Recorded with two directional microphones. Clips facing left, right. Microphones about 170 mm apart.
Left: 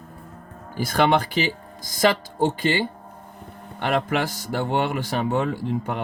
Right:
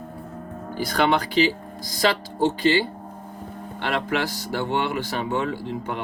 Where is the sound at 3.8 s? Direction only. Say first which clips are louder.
Left 2 dB; 50° left (ahead or behind).